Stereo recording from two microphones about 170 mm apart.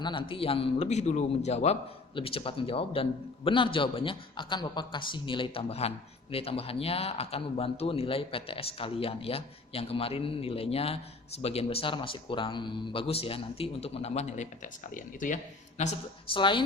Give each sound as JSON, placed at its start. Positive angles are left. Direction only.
{"t": 0.0, "sound": "speech", "side_deg": 30}
{"t": 16.3, "sound": "speech", "side_deg": 30}